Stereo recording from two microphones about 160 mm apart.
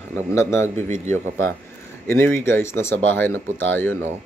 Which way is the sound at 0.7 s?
45° right (ahead or behind).